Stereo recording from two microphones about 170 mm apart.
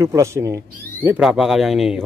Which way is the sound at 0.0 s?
20° right (ahead or behind).